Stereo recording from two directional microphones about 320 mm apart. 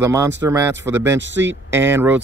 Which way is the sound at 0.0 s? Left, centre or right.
Centre.